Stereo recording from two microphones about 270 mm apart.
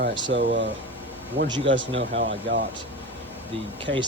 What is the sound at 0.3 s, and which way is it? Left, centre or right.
Speech, right.